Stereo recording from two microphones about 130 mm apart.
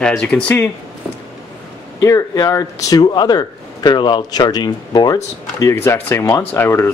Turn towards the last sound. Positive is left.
turn(degrees=20)  # may be behind; listen again after turning